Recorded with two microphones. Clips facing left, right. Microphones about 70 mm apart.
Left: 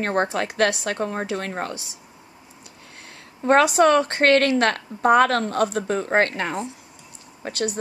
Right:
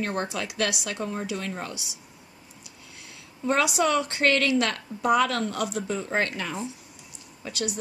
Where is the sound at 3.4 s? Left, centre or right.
Left.